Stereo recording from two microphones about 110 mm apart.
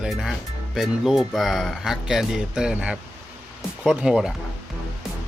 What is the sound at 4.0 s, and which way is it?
Speech, 5° right (ahead or behind).